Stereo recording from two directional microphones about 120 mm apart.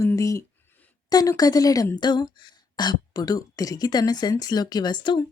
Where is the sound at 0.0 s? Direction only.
25° left (ahead or behind).